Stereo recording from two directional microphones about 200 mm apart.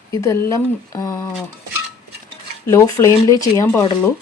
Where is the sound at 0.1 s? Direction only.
15° left (ahead or behind).